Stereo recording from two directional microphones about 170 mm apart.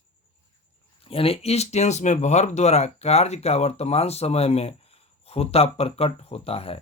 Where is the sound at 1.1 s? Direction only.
35° left (ahead or behind).